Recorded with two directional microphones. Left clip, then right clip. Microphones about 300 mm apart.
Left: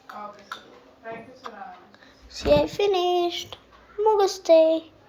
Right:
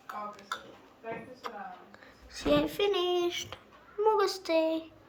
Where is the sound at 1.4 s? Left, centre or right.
Right.